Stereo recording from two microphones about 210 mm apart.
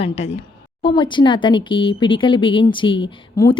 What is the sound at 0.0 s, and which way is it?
Speech, 30° left (ahead or behind).